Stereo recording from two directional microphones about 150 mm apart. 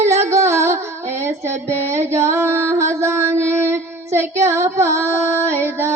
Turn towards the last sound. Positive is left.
turn(degrees=-15)  # may be behind; listen again after turning